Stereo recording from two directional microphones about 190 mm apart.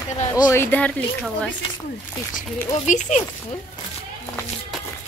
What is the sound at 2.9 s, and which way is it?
Speech, 40° left (ahead or behind).